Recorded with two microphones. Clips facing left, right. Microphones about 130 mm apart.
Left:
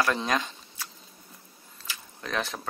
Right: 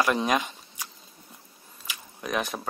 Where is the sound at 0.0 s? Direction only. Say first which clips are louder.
Right 2 dB; 15° right (ahead or behind).